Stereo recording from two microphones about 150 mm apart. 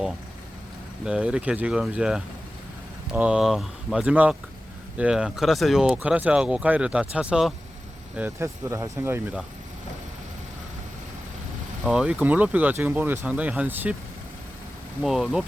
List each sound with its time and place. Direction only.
1.0 s speech: 5° right (ahead or behind)
11.9 s speech: 5° right (ahead or behind)
15.0 s speech: 5° right (ahead or behind)